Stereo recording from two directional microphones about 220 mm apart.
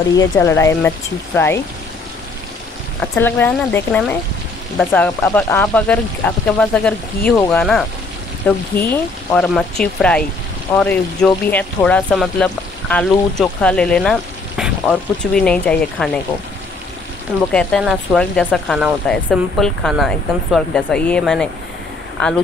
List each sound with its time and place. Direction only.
0.2 s speech: 15° left (ahead or behind)
3.0 s speech: 10° left (ahead or behind)
17.5 s speech: 5° left (ahead or behind)